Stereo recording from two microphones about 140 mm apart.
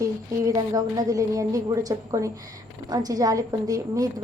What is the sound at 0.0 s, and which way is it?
A woman's voice, 25° right (ahead or behind).